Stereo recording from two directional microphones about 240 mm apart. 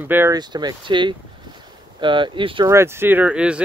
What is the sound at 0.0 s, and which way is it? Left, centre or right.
Speech, centre.